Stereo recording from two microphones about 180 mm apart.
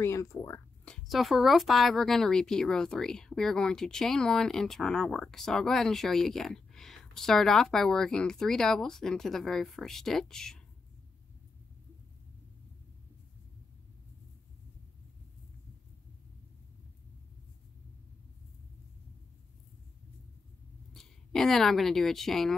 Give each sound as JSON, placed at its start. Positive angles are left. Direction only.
{"t": 0.0, "sound": "speech", "side_deg": 15}
{"t": 0.8, "sound": "a woman's voice", "side_deg": 0}
{"t": 20.9, "sound": "speech", "side_deg": 0}